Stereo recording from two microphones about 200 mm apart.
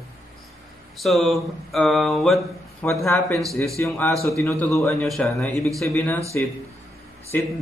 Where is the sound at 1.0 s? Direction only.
Centre (ahead or behind).